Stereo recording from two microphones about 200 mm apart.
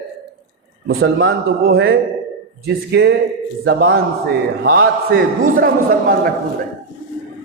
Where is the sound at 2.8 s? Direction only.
55° right (ahead or behind).